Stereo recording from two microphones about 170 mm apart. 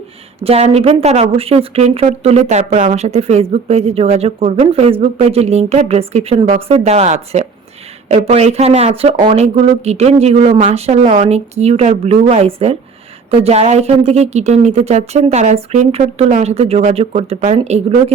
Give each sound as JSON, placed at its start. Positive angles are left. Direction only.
{"t": 0.4, "sound": "speech", "side_deg": -35}